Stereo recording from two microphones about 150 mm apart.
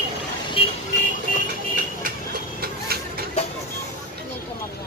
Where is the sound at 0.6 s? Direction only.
35° left (ahead or behind).